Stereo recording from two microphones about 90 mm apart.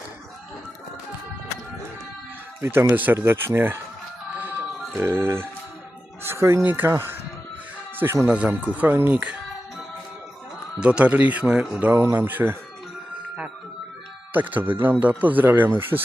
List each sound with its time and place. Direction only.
2.6 s speech: 30° right (ahead or behind)
4.9 s speech: 25° right (ahead or behind)
8.3 s speech: 15° right (ahead or behind)
10.8 s speech: 15° right (ahead or behind)
11.8 s speech: 25° right (ahead or behind)
14.3 s speech: 20° right (ahead or behind)